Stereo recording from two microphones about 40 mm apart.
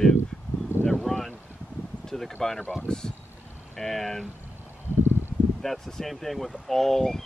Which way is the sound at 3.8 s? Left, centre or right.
Centre.